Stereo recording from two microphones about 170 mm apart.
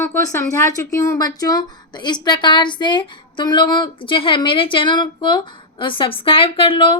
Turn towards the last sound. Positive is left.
turn(degrees=30)  # may be behind; listen again after turning